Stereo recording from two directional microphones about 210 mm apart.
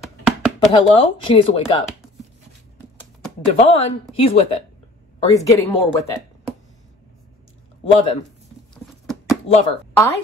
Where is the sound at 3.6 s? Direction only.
30° left (ahead or behind).